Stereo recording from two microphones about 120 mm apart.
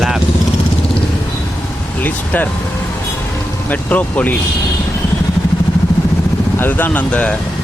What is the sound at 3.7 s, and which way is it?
Speech, 15° left (ahead or behind).